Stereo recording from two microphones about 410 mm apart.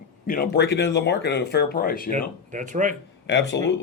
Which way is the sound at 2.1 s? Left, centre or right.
Centre.